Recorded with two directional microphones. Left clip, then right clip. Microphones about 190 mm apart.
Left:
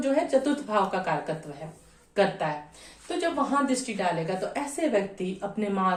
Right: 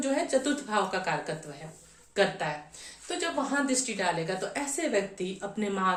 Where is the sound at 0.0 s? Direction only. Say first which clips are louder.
Left 3 dB; 30° right (ahead or behind).